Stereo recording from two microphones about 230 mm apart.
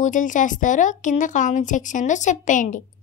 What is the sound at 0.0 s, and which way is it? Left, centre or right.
Speech, left.